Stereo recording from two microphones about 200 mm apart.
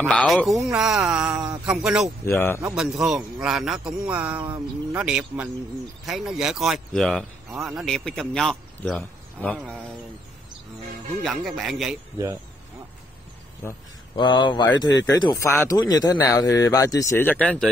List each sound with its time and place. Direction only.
0.1 s speech: 5° left (ahead or behind)
2.2 s a man's voice: 10° left (ahead or behind)
2.7 s speech: centre (ahead or behind)
11.2 s speech: centre (ahead or behind)
13.7 s a man's voice: 25° left (ahead or behind); by 17.6 s 5° left (ahead or behind)